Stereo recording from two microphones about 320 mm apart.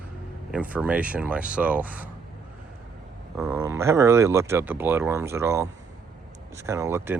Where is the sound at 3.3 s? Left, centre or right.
Centre.